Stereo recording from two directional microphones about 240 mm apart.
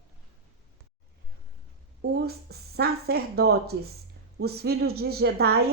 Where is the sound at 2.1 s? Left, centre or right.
Right.